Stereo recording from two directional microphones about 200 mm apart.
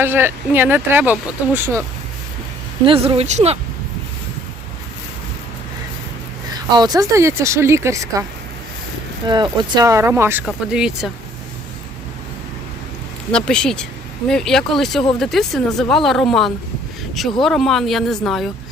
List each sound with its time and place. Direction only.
0.0 s speech: 10° right (ahead or behind)
2.8 s speech: 25° right (ahead or behind)
6.7 s speech: 20° right (ahead or behind)
9.2 s speech: 20° right (ahead or behind); by 11.1 s 5° right (ahead or behind)
13.3 s speech: 5° left (ahead or behind)